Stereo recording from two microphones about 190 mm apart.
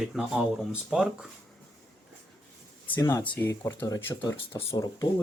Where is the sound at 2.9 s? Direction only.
10° left (ahead or behind).